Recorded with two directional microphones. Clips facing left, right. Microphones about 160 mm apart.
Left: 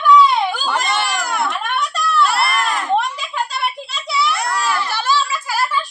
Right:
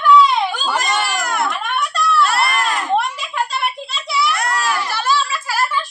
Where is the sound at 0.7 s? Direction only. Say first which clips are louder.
Even; 10° right (ahead or behind).